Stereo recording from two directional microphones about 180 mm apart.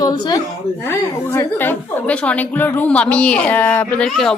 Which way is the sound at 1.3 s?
10° left (ahead or behind).